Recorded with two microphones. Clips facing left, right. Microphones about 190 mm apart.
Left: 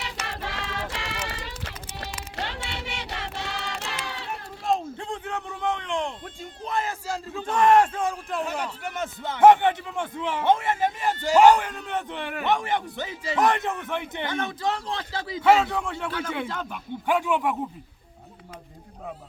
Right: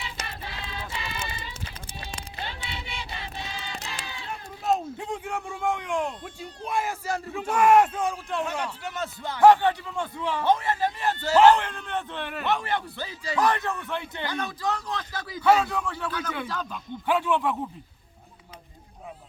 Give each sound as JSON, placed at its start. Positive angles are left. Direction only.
{"t": 0.3, "sound": "music", "side_deg": 85}
{"t": 4.0, "sound": "run", "side_deg": 75}
{"t": 4.6, "sound": "a sound", "side_deg": -5}
{"t": 6.7, "sound": "a man's voice", "side_deg": -15}
{"t": 9.2, "sound": "a man's voice", "side_deg": 20}